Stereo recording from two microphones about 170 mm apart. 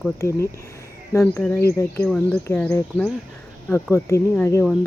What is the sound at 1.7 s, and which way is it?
Speech, 20° left (ahead or behind).